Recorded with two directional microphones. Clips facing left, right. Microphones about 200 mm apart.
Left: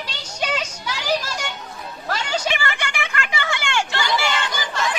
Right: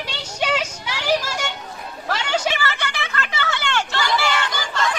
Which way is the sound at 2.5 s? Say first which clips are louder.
Even; 15° left (ahead or behind).